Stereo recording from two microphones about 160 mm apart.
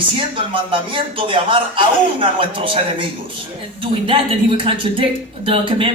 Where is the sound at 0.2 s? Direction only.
35° right (ahead or behind).